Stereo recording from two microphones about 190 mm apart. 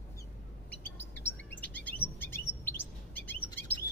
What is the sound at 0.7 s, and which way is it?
Chirp, 10° left (ahead or behind).